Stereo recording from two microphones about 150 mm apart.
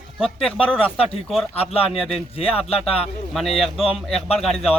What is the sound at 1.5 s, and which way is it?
Speech, 40° left (ahead or behind).